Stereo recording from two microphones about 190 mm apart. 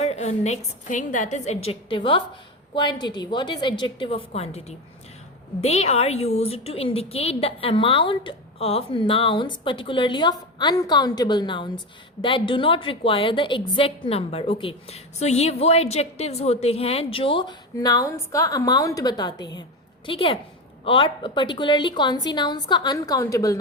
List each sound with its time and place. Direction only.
0.0 s a woman's voice: 35° left (ahead or behind)
5.6 s a woman's voice: 35° left (ahead or behind); by 23.6 s 15° left (ahead or behind)